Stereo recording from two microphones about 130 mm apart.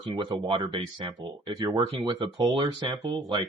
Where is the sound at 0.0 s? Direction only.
35° right (ahead or behind).